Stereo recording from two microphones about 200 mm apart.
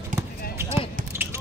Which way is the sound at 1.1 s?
10° right (ahead or behind).